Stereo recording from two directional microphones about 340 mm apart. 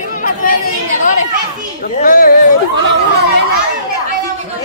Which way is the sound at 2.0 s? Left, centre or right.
Left.